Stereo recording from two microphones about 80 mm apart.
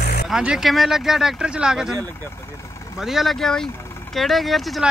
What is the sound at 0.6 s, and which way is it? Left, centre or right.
Speech, centre.